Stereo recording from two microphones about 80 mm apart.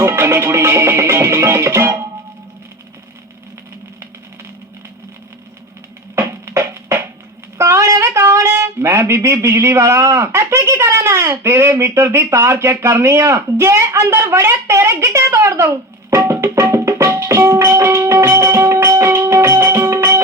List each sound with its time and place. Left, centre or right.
0.0 s speech: right
6.1 s music: right
7.6 s speech: right